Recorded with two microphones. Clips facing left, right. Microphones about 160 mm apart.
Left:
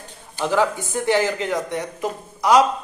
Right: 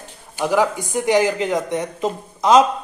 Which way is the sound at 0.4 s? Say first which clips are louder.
Right 2 dB; 15° right (ahead or behind).